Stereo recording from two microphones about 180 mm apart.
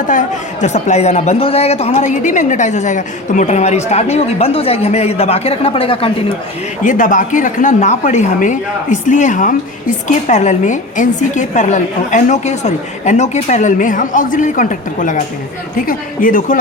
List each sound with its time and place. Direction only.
0.1 s speech: 45° left (ahead or behind)
6.8 s speech: 50° left (ahead or behind)